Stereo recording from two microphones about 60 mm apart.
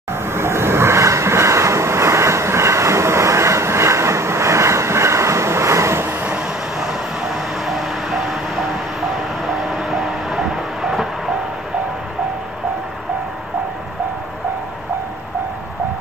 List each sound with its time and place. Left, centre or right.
0.1 s vehicle: right
6.8 s vehicle: centre
9.5 s train: centre